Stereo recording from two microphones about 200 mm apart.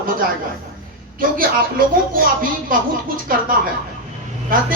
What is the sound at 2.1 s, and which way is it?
A man's voice, 45° right (ahead or behind).